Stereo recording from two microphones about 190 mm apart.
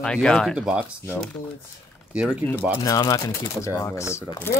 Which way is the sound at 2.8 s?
15° left (ahead or behind).